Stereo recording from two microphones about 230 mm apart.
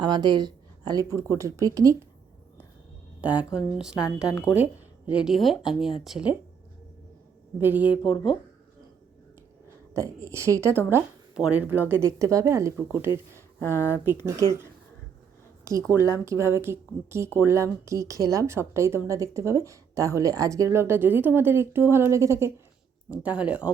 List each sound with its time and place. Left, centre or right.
0.0 s a woman's voice: centre
3.2 s a woman's voice: centre
7.6 s a woman's voice: centre
9.9 s a woman's voice: centre
13.6 s speech: centre
15.9 s a woman's voice: centre